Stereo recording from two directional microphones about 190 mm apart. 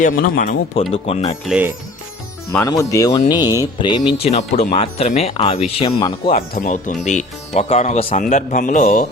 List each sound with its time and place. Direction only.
0.0 s speech: 45° left (ahead or behind)
1.0 s speech: 30° left (ahead or behind)
1.5 s speech: 5° right (ahead or behind)
2.5 s speech: 15° left (ahead or behind)
6.3 s speech: 50° left (ahead or behind)